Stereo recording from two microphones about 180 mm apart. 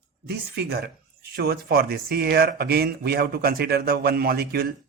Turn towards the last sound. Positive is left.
turn(degrees=-60)  # may be behind; listen again after turning